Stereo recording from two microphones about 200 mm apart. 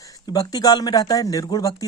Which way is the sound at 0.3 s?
20° left (ahead or behind).